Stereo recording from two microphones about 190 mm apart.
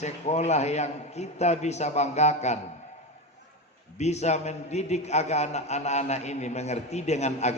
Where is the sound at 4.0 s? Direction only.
35° left (ahead or behind).